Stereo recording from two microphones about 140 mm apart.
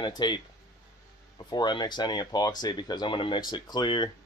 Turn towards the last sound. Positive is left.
turn(degrees=35)  # may be behind; listen again after turning